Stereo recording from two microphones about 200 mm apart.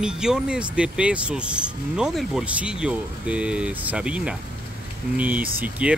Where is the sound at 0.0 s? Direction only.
5° right (ahead or behind).